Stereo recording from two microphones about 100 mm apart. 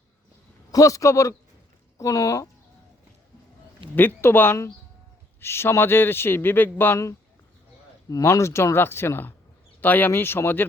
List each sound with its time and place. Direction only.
0.7 s a man's voice: 35° left (ahead or behind)
3.9 s a man's voice: 20° left (ahead or behind)
8.1 s a man's voice: 30° left (ahead or behind)